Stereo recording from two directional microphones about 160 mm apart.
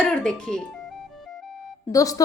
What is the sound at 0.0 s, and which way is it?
Music, 5° left (ahead or behind).